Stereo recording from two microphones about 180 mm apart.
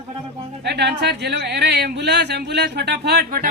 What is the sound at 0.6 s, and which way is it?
Speech, 70° right (ahead or behind).